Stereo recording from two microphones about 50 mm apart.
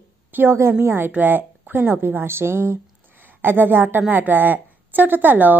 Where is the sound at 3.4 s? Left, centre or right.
Right.